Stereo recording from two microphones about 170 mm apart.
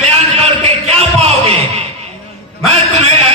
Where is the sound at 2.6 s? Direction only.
40° right (ahead or behind).